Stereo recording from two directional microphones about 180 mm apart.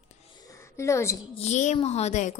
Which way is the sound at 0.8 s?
15° left (ahead or behind).